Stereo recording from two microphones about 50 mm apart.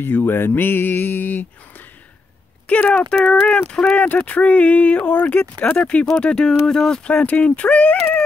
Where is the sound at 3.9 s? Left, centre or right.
Left; by 7.0 s centre.